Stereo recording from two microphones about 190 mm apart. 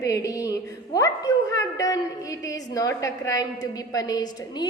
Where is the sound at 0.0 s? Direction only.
15° left (ahead or behind).